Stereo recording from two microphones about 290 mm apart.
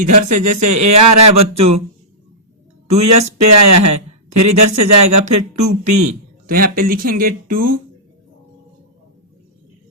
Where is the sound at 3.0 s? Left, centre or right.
Right.